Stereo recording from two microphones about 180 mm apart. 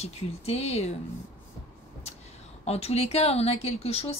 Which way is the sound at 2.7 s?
35° left (ahead or behind).